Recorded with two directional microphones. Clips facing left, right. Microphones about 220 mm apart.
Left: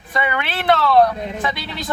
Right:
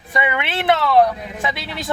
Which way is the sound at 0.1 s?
20° right (ahead or behind).